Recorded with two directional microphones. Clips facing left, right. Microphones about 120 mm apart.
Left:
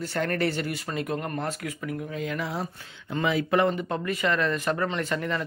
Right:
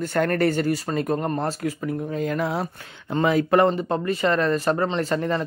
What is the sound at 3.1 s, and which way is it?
Speech, 45° right (ahead or behind).